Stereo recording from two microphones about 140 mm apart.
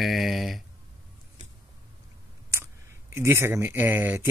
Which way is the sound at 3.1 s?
20° right (ahead or behind).